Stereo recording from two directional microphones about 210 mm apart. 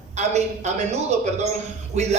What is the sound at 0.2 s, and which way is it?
A man's voice, 30° right (ahead or behind).